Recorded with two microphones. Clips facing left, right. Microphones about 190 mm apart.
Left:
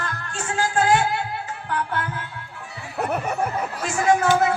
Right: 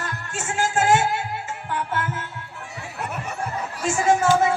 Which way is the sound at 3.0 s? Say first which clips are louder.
Left 6 dB; 50° left (ahead or behind).